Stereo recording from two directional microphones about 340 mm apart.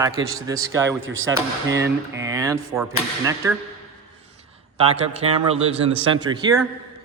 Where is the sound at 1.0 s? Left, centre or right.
Right.